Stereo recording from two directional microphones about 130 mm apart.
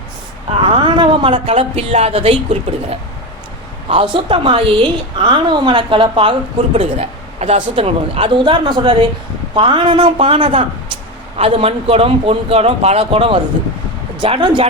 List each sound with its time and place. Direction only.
0.5 s a woman's voice: 40° right (ahead or behind)
6.7 s a woman's voice: 55° right (ahead or behind)